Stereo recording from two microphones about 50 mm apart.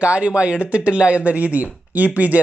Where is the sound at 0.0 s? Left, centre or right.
Right.